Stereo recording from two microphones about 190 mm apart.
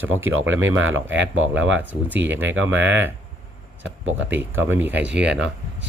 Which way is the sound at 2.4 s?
85° right.